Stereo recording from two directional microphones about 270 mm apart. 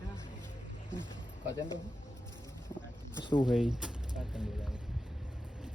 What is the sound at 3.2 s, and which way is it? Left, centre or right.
Speech, centre.